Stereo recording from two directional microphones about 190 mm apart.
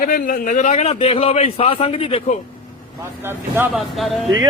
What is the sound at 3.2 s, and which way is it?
Speech, 10° right (ahead or behind).